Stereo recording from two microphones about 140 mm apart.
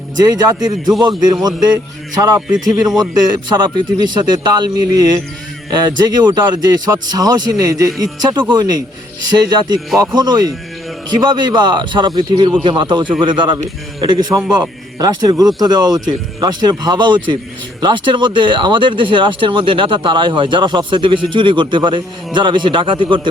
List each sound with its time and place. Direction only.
0.2 s speech: 30° right (ahead or behind)
2.6 s a man's voice: centre (ahead or behind)
3.0 s speech: 30° right (ahead or behind)
14.6 s speech: 30° right (ahead or behind)